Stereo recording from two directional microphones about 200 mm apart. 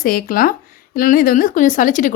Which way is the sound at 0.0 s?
45° left (ahead or behind).